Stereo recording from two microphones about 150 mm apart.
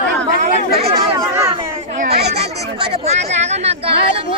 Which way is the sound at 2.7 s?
40° right (ahead or behind).